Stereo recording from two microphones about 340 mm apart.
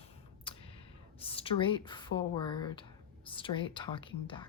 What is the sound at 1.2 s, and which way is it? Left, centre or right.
Speech, centre.